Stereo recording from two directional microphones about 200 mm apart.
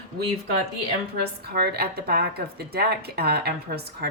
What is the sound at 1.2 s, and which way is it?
A woman's voice, 50° right (ahead or behind).